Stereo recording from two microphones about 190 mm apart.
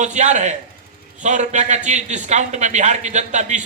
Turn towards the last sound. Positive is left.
turn(degrees=-40)  # may be behind; listen again after turning